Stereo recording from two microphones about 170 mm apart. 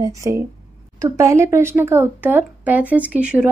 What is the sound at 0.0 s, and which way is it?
Speech, 20° right (ahead or behind).